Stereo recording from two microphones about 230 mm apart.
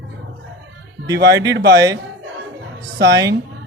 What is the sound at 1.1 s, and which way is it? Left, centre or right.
Speech, right.